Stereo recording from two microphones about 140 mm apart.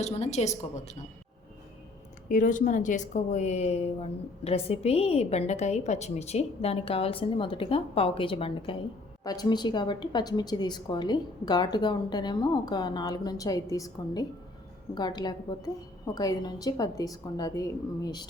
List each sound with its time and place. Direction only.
0.0 s a woman's voice: 50° left (ahead or behind)
2.3 s a woman's voice: 70° left (ahead or behind); by 8.7 s 40° left (ahead or behind)
9.2 s a woman's voice: 30° left (ahead or behind)